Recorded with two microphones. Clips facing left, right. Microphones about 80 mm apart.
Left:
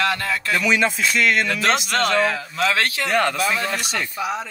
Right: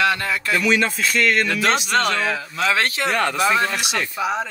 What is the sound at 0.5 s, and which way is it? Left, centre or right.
Speech, centre.